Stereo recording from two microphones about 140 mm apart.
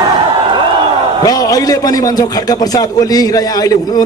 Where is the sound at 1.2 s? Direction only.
25° left (ahead or behind).